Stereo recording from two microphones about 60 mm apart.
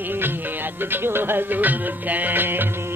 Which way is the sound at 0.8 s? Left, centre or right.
Right.